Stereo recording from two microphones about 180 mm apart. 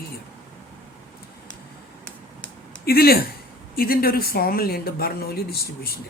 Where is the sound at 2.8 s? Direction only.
60° left (ahead or behind).